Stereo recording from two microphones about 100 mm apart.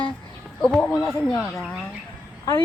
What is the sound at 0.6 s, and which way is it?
Speech, 5° left (ahead or behind).